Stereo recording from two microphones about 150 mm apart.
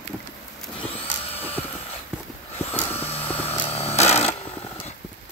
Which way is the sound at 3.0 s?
40° left (ahead or behind).